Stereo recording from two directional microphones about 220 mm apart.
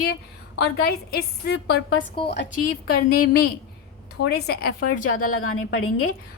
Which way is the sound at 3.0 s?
45° left (ahead or behind).